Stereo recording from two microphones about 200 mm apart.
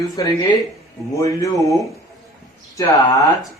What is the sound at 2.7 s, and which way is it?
Speech, 15° left (ahead or behind).